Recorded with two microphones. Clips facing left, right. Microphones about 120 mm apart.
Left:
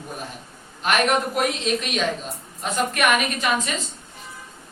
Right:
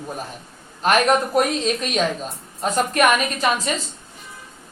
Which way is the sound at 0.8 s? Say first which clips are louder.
Right 3 dB; 40° right (ahead or behind).